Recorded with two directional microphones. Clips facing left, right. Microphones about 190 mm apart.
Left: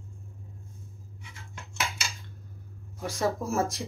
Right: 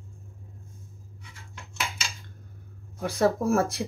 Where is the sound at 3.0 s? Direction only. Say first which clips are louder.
Right 5 dB; 60° right (ahead or behind).